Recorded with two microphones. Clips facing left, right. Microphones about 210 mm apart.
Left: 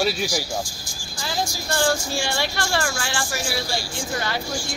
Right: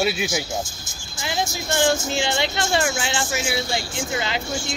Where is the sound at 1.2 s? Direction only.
20° right (ahead or behind).